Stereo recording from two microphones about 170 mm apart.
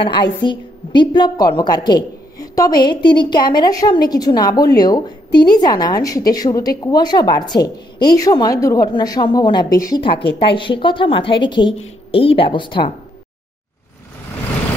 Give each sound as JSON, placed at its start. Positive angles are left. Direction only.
{"t": 0.0, "sound": "a woman's voice", "side_deg": 30}